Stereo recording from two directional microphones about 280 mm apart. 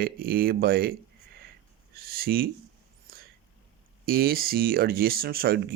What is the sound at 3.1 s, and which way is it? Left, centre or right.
Whispering, right.